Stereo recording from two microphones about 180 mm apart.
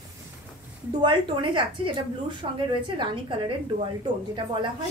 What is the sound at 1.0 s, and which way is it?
A woman's voice, 25° right (ahead or behind).